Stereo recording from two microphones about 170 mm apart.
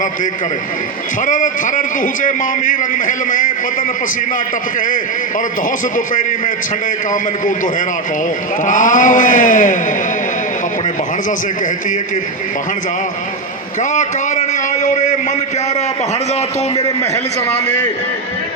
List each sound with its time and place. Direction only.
1.2 s a man's voice: 50° left (ahead or behind)
7.1 s a man's voice: 50° left (ahead or behind)
13.9 s a sound: 45° left (ahead or behind)